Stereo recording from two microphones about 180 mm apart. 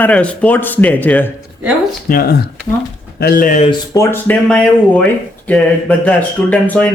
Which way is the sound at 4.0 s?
10° left (ahead or behind).